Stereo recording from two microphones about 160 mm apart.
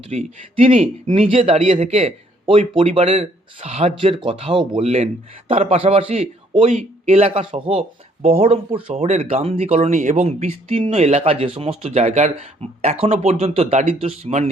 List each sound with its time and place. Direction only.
0.1 s speech: 40° right (ahead or behind)